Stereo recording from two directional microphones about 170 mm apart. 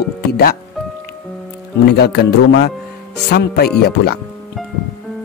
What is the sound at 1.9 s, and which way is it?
Speech, 75° left (ahead or behind).